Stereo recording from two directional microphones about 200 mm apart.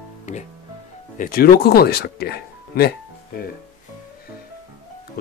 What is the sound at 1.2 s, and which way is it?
Speech, 50° left (ahead or behind).